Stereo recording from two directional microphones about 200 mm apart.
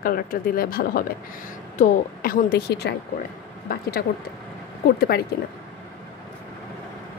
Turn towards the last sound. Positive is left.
turn(degrees=50)  # may be behind; listen again after turning